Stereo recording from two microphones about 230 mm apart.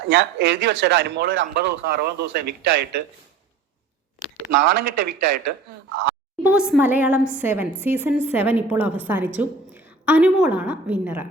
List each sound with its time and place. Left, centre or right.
0.1 s speech: right
4.6 s speech: right
6.4 s a woman's voice: centre